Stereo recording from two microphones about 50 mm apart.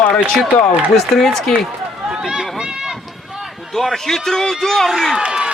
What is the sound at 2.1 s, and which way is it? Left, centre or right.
Run, centre.